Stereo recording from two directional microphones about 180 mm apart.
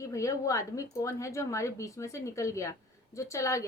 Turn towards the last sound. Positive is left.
turn(degrees=15)  # may be behind; listen again after turning